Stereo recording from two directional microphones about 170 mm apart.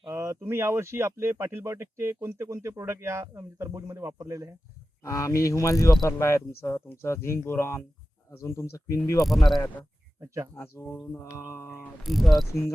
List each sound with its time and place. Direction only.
0.1 s speech: 15° right (ahead or behind)
5.0 s mechanisms: 20° left (ahead or behind)
10.2 s speech: 15° right (ahead or behind)
10.5 s mechanisms: 15° left (ahead or behind)
12.0 s cricket: centre (ahead or behind)